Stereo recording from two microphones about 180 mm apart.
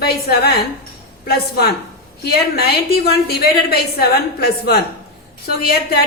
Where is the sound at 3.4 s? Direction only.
60° left (ahead or behind).